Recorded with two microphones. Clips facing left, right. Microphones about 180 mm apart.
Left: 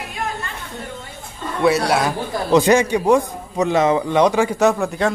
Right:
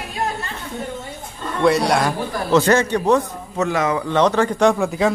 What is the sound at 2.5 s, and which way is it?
A man's voice, 15° left (ahead or behind).